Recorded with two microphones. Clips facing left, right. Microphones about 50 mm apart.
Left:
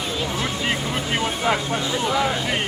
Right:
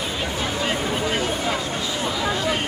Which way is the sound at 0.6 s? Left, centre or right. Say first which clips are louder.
Right 2 dB; left.